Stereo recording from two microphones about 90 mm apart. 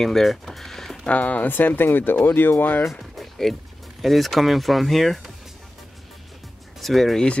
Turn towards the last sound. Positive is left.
turn(degrees=5)  # may be behind; listen again after turning